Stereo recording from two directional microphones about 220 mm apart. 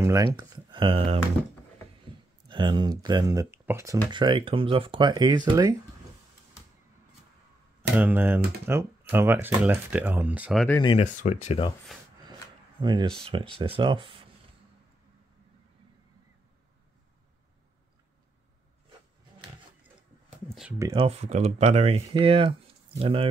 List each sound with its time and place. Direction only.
0.0 s speech: 15° right (ahead or behind)
2.4 s speech: 20° right (ahead or behind)
7.9 s speech: 5° right (ahead or behind)
10.8 s speech: 25° left (ahead or behind)
12.8 s speech: 20° right (ahead or behind)
20.0 s a sound: 5° right (ahead or behind)
20.8 s speech: 20° right (ahead or behind)